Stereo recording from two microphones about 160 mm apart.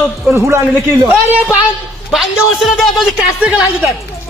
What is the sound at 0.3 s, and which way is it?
Speech, 15° right (ahead or behind).